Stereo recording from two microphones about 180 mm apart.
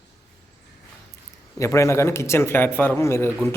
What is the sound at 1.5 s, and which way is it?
Speech, 15° left (ahead or behind).